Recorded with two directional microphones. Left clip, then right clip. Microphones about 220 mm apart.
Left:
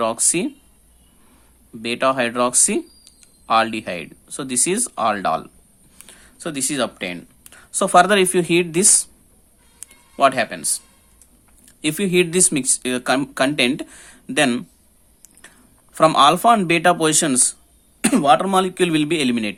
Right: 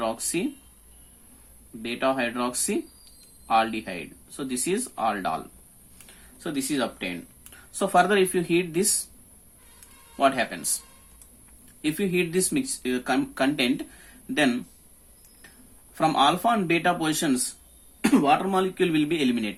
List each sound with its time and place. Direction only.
0.0 s speech: 45° left (ahead or behind)
1.8 s speech: 45° left (ahead or behind)
10.2 s speech: 40° left (ahead or behind)
16.0 s speech: 45° left (ahead or behind)